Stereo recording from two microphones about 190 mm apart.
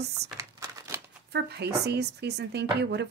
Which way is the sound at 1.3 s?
60° right (ahead or behind).